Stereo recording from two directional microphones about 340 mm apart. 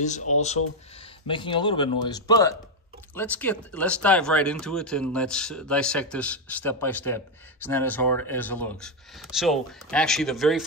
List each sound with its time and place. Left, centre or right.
0.0 s speech: centre